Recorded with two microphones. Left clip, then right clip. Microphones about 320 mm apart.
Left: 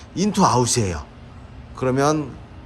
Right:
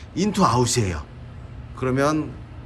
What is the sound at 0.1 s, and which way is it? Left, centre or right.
Speech, centre.